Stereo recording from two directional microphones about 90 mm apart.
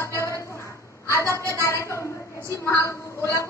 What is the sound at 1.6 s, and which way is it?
A woman's voice, 35° left (ahead or behind).